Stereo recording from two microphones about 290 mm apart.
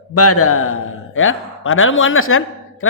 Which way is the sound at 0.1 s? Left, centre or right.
Left.